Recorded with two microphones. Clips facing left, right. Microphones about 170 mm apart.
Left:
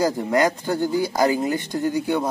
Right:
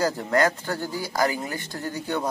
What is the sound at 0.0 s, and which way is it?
Speech, 15° left (ahead or behind).